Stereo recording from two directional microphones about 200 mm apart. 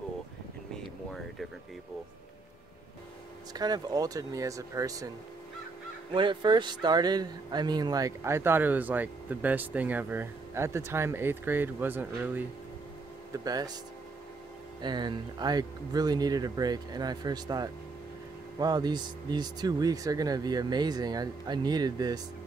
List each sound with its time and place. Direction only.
3.5 s speech: 20° right (ahead or behind)
6.1 s speech: 25° right (ahead or behind)
14.8 s speech: 20° right (ahead or behind)